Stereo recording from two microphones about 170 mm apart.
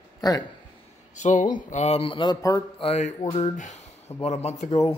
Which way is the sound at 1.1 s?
45° left (ahead or behind).